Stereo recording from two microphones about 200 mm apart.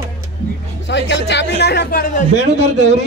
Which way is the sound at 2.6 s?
35° right (ahead or behind).